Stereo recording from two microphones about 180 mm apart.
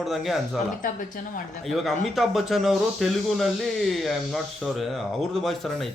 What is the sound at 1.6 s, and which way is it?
Speech, centre (ahead or behind).